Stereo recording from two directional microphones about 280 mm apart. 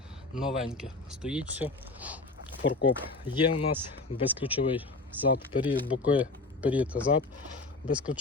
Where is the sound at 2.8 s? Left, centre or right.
Centre.